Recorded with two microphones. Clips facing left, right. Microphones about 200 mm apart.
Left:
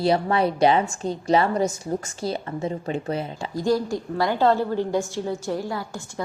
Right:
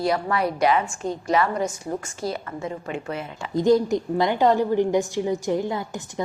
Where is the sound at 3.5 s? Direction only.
20° right (ahead or behind).